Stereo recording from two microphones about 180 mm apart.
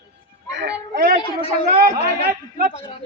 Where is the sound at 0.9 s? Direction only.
50° right (ahead or behind).